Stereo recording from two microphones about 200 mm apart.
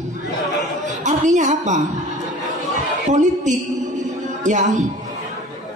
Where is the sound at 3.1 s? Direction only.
35° right (ahead or behind).